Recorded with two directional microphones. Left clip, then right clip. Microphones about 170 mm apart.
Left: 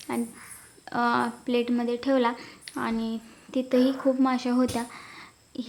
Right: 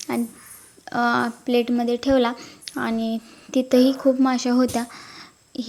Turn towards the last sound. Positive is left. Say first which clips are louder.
# right 5 dB
turn(degrees=-25)  # may be behind; listen again after turning